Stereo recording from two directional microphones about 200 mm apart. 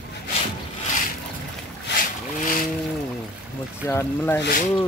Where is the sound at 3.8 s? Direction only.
15° left (ahead or behind).